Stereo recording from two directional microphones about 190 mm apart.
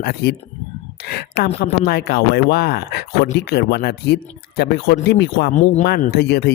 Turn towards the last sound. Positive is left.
turn(degrees=60)  # may be behind; listen again after turning